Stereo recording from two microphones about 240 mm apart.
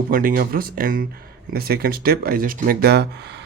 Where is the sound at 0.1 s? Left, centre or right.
Right.